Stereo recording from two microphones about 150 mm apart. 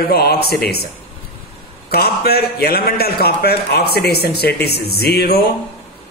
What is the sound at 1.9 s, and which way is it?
A man's voice, 90° left.